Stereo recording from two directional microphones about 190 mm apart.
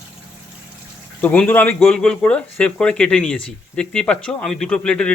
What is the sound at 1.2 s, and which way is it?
Speech, 10° left (ahead or behind).